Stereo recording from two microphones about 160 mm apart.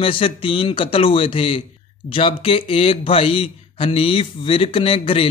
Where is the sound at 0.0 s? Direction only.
35° left (ahead or behind).